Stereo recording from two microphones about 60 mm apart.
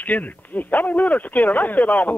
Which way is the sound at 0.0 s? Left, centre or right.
Left.